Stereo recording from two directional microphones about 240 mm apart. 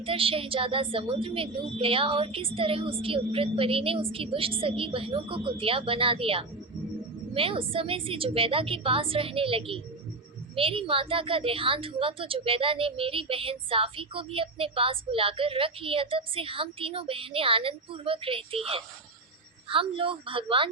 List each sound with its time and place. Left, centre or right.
0.0 s a woman's voice: right